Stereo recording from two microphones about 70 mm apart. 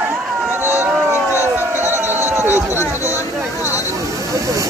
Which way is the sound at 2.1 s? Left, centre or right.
Right.